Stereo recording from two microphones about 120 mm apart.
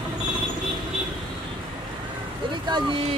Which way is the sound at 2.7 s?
45° right (ahead or behind).